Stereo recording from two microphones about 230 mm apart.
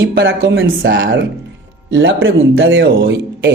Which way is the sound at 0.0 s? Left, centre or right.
Right.